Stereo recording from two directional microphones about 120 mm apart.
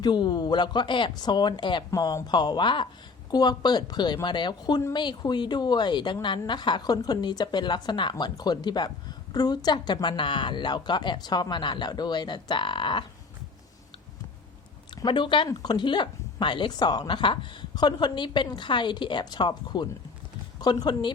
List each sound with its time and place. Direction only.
0.0 s speech: 40° left (ahead or behind)
15.0 s speech: 40° left (ahead or behind)